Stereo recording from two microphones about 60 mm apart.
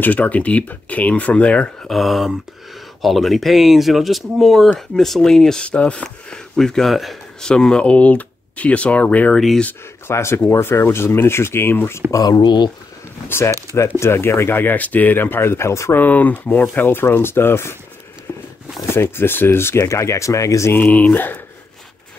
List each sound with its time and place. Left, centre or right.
0.0 s speech: left
1.9 s speech: centre
5.6 s speech: centre
6.0 s speech: centre
7.4 s speech: centre
10.0 s speech: left
12.1 s speech: left
13.3 s speech: left
15.9 s speech: left
18.9 s speech: left
20.7 s speech: left